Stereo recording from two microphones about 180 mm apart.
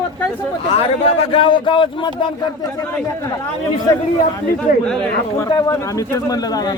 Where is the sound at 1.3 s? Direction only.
30° left (ahead or behind).